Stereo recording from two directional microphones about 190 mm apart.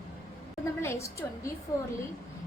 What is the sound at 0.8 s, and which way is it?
A woman's voice, 15° left (ahead or behind).